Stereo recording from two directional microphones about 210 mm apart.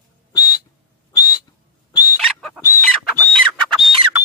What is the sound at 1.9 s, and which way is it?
Fowl, 15° left (ahead or behind).